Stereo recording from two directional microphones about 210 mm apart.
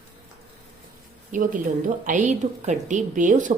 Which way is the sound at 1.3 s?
40° right (ahead or behind).